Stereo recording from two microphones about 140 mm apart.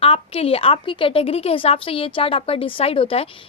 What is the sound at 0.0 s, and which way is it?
A woman's voice, 40° left (ahead or behind).